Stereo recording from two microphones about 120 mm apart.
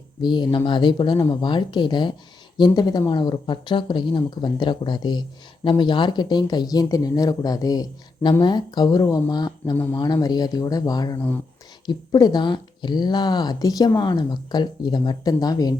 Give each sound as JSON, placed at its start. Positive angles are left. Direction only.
{"t": 0.2, "sound": "speech", "side_deg": 40}
{"t": 9.7, "sound": "speech", "side_deg": 15}
{"t": 10.0, "sound": "speech", "side_deg": 30}